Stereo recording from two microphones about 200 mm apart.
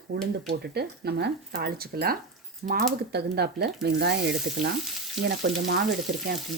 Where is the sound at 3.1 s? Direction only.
55° right (ahead or behind).